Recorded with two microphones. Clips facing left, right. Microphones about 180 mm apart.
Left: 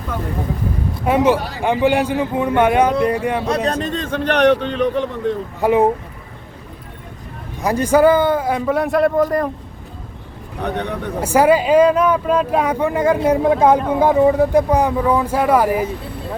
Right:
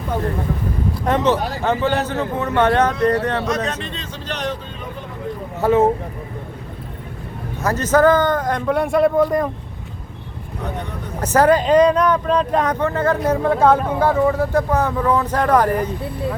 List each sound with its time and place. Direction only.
1.0 s speech: 10° left (ahead or behind)
3.4 s a man's voice: 30° left (ahead or behind); by 5.0 s 75° left (ahead or behind)
5.5 s speech: 15° left (ahead or behind)
7.6 s speech: 10° left (ahead or behind)
10.6 s speech: 70° left (ahead or behind)
11.2 s speech: 10° left (ahead or behind)